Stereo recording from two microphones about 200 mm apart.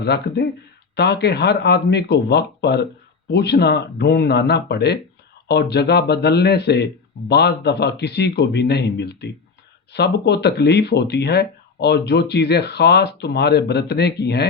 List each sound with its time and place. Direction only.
0.0 s speech: 55° left (ahead or behind)